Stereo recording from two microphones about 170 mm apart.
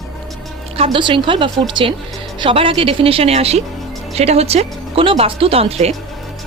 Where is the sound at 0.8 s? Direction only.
30° right (ahead or behind).